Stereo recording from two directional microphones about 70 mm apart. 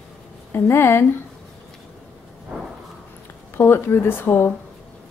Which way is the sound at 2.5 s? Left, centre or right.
Centre.